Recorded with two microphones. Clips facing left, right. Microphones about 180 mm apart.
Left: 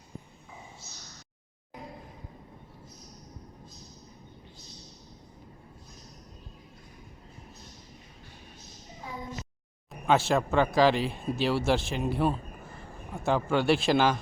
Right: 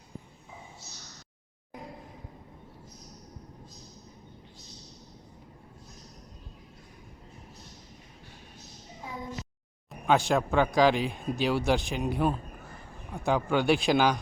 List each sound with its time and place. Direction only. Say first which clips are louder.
10.1 s a man's voice: even; centre (ahead or behind)